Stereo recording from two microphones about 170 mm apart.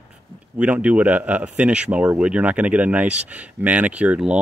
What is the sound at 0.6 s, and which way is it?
Speech, 10° right (ahead or behind).